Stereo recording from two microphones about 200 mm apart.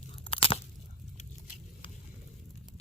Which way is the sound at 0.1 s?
25° left (ahead or behind).